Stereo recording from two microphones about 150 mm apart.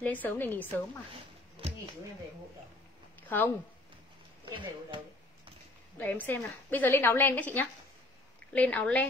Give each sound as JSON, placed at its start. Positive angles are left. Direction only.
{"t": 0.0, "sound": "a woman's voice", "side_deg": 10}
{"t": 1.6, "sound": "a sound", "side_deg": -35}
{"t": 3.2, "sound": "speech", "side_deg": 15}
{"t": 4.5, "sound": "speech", "side_deg": -30}
{"t": 5.9, "sound": "a woman's voice", "side_deg": 15}